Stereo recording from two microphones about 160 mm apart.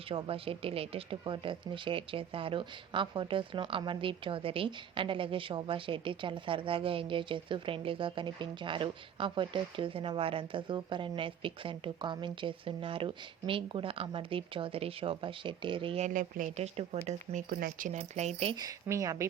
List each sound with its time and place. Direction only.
0.1 s speech: 35° right (ahead or behind)
16.0 s speech: 50° right (ahead or behind)
17.6 s speech: 55° right (ahead or behind)
18.5 s a woman's voice: 20° right (ahead or behind)